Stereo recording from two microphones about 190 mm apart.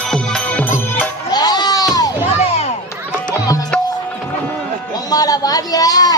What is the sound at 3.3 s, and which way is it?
Music, 20° left (ahead or behind).